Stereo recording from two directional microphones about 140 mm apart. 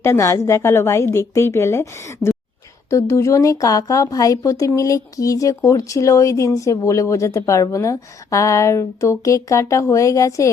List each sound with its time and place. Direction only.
0.0 s a woman's voice: 20° left (ahead or behind)